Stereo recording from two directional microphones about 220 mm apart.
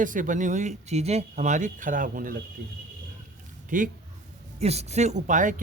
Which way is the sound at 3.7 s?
35° right (ahead or behind).